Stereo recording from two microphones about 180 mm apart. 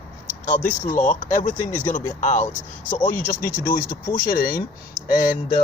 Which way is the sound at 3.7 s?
50° left (ahead or behind).